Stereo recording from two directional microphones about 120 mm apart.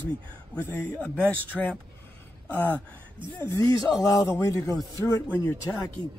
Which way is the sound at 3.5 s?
30° left (ahead or behind).